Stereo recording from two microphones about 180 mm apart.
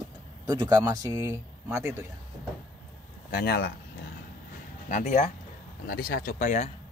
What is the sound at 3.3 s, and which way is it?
Speech, 65° left (ahead or behind).